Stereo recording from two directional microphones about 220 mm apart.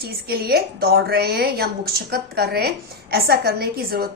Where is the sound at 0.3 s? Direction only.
45° right (ahead or behind).